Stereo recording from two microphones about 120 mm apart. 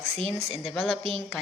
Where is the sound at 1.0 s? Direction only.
55° right (ahead or behind).